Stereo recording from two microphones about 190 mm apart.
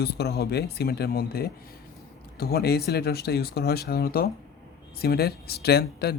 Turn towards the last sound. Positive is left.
turn(degrees=55)  # may be behind; listen again after turning